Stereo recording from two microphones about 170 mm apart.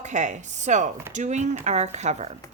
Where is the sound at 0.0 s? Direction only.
45° right (ahead or behind).